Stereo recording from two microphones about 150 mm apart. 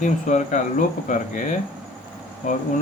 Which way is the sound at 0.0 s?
55° left (ahead or behind).